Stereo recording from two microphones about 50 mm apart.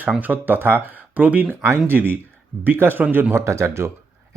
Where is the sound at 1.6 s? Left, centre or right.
Right.